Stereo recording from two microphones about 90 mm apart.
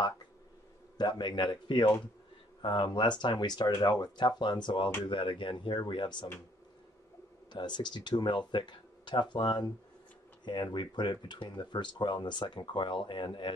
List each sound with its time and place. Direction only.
0.9 s speech: 55° left (ahead or behind)
7.5 s speech: 55° left (ahead or behind)